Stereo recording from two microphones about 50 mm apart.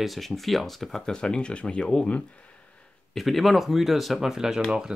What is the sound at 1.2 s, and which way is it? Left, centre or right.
Speech, centre.